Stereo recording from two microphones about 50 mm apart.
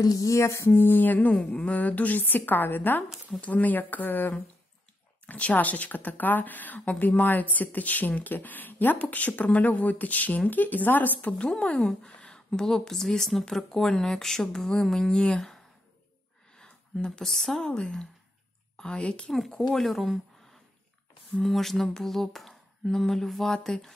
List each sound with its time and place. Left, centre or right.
0.3 s a sound: left
0.7 s speech: left
1.3 s speech: left
12.0 s a sound: left
12.3 s speech: centre
17.2 s speech: centre
17.6 s a woman's voice: centre
19.7 s speech: centre
21.4 s speech: centre